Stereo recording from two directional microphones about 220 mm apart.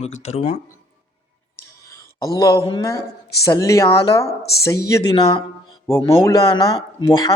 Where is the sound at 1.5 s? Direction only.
15° left (ahead or behind).